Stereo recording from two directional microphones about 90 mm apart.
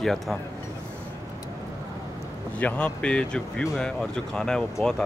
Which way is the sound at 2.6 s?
15° left (ahead or behind).